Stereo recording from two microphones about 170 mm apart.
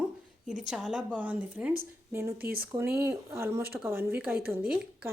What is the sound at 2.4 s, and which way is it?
Speech, 60° right (ahead or behind).